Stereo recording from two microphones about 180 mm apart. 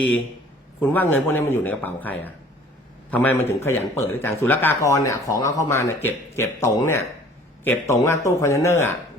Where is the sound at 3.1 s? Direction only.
10° left (ahead or behind).